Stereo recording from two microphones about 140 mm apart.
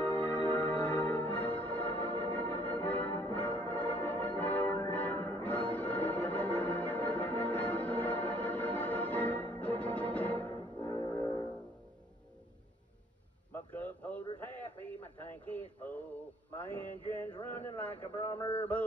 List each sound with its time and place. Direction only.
0.0 s music: 10° left (ahead or behind)
5.4 s organ: 10° left (ahead or behind)
10.8 s music: 25° left (ahead or behind)
13.5 s a sound: 10° left (ahead or behind)
16.5 s mantra: 10° left (ahead or behind)
17.1 s a sound: 15° left (ahead or behind)